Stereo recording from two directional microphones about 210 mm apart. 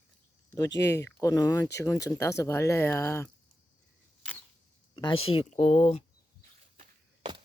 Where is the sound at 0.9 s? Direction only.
15° left (ahead or behind).